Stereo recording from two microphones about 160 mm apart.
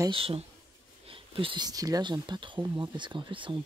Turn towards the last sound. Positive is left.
turn(degrees=-30)  # may be behind; listen again after turning